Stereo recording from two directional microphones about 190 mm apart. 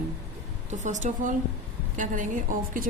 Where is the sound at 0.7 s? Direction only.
40° right (ahead or behind).